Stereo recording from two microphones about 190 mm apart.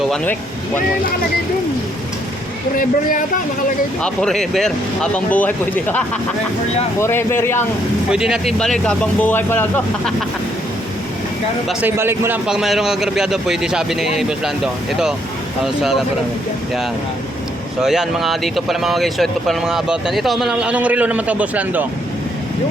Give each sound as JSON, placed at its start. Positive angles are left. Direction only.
{"t": 0.0, "sound": "speech", "side_deg": 5}
{"t": 2.7, "sound": "speech", "side_deg": 45}
{"t": 4.0, "sound": "speech", "side_deg": 5}
{"t": 7.0, "sound": "speech", "side_deg": 15}
{"t": 8.1, "sound": "speech", "side_deg": -5}
{"t": 11.7, "sound": "speech", "side_deg": -10}
{"t": 17.7, "sound": "speech", "side_deg": -5}